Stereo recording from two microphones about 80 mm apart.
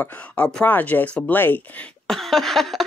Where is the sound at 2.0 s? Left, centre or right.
Centre.